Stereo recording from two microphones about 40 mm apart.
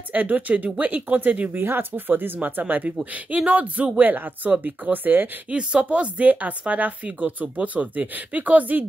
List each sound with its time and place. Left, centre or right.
0.1 s speech: right
1.5 s speech: right
2.0 s speech: right
3.3 s speech: right
4.0 s speech: right
5.5 s speech: right